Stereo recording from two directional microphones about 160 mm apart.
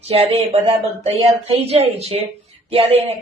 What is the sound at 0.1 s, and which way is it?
Speech, 40° right (ahead or behind).